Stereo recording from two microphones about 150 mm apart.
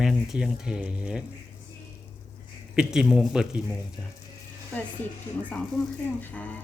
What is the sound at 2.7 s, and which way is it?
Speech, 5° right (ahead or behind).